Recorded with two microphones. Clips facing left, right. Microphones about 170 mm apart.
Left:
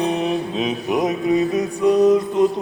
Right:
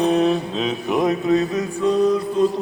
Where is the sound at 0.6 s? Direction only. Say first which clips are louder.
Right 1 dB; 20° left (ahead or behind).